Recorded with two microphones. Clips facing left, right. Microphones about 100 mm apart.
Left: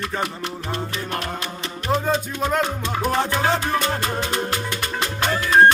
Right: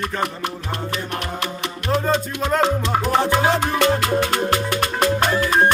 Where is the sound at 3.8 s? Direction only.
75° right (ahead or behind); by 5.4 s 50° right (ahead or behind).